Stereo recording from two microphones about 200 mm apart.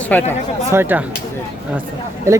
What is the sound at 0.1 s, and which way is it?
Speech, 5° left (ahead or behind).